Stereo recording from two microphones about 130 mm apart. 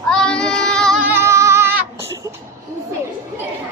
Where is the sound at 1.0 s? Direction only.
20° right (ahead or behind).